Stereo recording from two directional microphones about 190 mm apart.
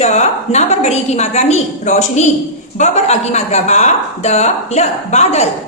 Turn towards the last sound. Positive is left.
turn(degrees=35)  # may be behind; listen again after turning